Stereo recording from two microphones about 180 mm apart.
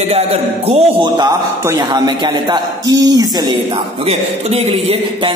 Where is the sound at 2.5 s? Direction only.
20° right (ahead or behind).